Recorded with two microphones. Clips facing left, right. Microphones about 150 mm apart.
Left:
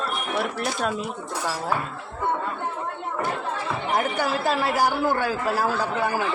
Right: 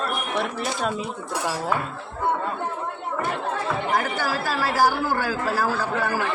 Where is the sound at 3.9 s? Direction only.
20° left (ahead or behind).